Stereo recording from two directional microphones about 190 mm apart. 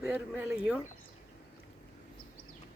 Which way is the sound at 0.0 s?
5° right (ahead or behind).